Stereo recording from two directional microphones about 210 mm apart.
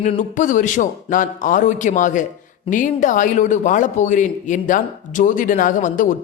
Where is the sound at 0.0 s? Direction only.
35° left (ahead or behind).